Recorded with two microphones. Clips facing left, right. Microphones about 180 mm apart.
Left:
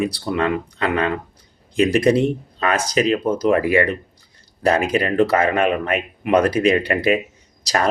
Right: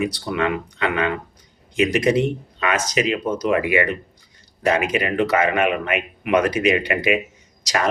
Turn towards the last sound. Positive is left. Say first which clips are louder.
# left 2 dB
turn(degrees=35)  # may be behind; listen again after turning